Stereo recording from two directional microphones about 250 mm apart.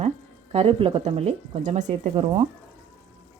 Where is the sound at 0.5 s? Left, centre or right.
Right.